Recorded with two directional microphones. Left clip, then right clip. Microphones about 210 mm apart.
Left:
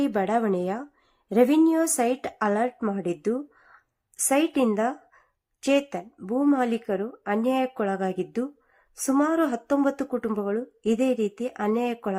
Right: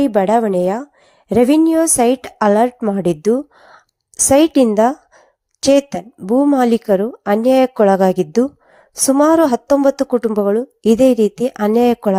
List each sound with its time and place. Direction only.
0.0 s a woman's voice: 30° right (ahead or behind)